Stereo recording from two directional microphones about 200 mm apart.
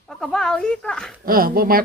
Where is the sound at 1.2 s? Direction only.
45° right (ahead or behind).